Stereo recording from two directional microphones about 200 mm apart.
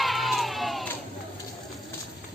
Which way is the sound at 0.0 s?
Centre (ahead or behind).